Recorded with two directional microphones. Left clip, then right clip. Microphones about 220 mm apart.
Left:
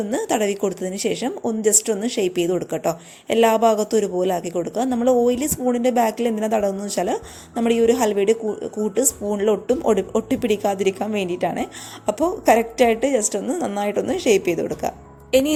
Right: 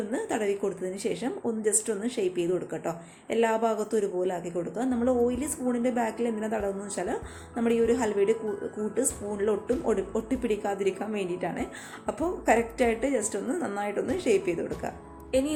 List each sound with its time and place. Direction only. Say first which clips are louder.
0.1 s speech: left 8 dB; 40° left (ahead or behind)